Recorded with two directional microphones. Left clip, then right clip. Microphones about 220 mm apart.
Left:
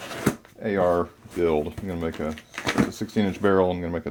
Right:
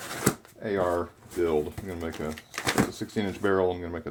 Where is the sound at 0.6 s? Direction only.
40° left (ahead or behind).